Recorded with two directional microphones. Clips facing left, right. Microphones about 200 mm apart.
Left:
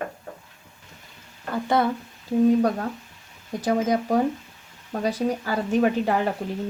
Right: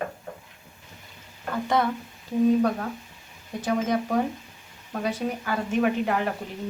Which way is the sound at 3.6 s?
35° left (ahead or behind).